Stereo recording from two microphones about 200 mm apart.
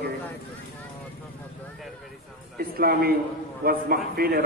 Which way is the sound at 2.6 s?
50° right (ahead or behind).